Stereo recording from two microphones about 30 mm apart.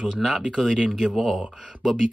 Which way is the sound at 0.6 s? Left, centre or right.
Right.